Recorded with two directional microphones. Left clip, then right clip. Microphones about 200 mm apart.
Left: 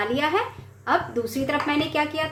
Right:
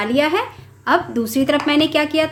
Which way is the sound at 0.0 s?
35° right (ahead or behind).